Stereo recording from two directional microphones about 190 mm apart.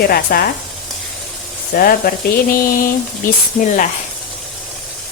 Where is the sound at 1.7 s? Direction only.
50° left (ahead or behind).